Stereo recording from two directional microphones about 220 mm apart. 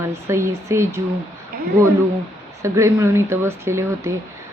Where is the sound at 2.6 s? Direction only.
15° right (ahead or behind).